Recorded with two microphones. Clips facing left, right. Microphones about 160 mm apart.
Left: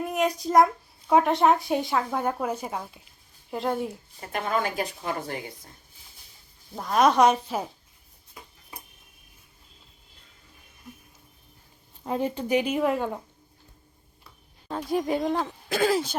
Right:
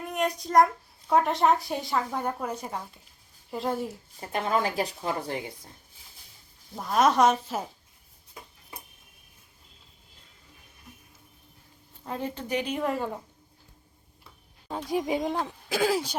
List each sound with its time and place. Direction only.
0.1 s a child's voice: centre (ahead or behind)
4.2 s a woman's voice: 30° right (ahead or behind)
6.7 s a child's voice: centre (ahead or behind)
12.0 s speech: 15° left (ahead or behind)
14.8 s speech: 10° right (ahead or behind)